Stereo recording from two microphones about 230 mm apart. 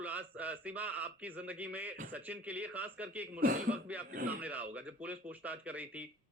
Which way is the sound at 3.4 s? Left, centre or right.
Right.